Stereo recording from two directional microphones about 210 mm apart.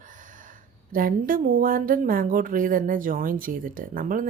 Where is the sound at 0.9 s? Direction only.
40° right (ahead or behind).